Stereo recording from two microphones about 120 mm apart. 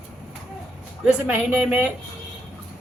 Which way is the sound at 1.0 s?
10° right (ahead or behind).